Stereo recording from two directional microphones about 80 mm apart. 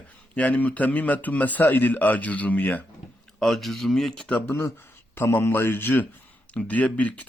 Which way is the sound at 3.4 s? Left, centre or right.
Centre.